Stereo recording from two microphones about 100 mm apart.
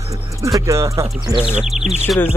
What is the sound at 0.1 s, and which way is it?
Music, 30° right (ahead or behind).